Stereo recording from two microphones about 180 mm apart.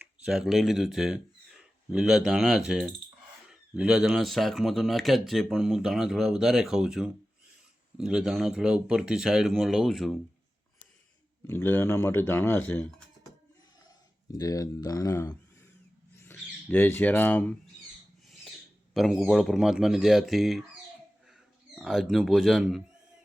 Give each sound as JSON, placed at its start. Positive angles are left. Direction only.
{"t": 0.3, "sound": "speech", "side_deg": 0}
{"t": 11.4, "sound": "speech", "side_deg": 10}
{"t": 14.3, "sound": "speech", "side_deg": 20}
{"t": 18.9, "sound": "speech", "side_deg": 0}
{"t": 21.8, "sound": "speech", "side_deg": -5}